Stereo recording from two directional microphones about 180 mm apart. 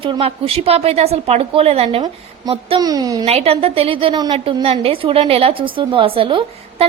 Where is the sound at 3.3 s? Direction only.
35° right (ahead or behind).